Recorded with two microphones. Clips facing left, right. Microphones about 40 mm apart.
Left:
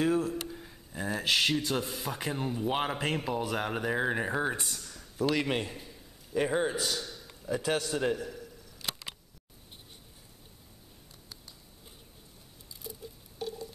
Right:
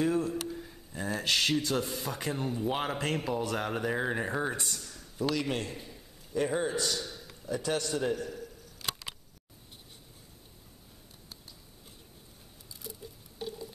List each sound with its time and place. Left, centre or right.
0.0 s a man's voice: centre
5.3 s a man's voice: left
5.8 s a sound: centre
6.3 s speech: left
7.1 s a sound: centre
7.4 s speech: centre